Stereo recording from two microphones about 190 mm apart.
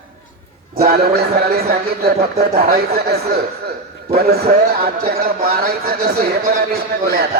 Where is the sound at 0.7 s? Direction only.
55° right (ahead or behind).